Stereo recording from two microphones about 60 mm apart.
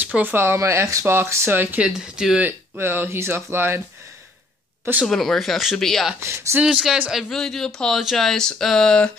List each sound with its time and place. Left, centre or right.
0.0 s speech: right
0.6 s speech: right
1.8 s speech: centre
2.8 s speech: right
5.0 s a woman's voice: centre
6.1 s speech: right
6.6 s speech: centre
7.2 s a woman's voice: centre